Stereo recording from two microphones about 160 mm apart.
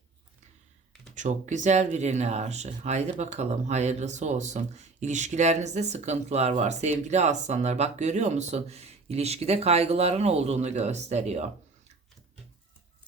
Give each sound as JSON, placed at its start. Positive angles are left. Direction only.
{"t": 1.1, "sound": "speech", "side_deg": -50}